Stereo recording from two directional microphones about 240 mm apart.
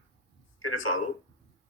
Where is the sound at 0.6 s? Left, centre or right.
Left.